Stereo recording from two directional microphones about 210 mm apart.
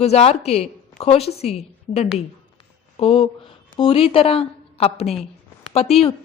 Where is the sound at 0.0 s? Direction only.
30° left (ahead or behind).